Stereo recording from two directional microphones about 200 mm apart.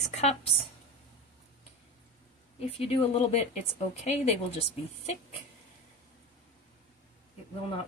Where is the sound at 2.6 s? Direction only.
30° left (ahead or behind).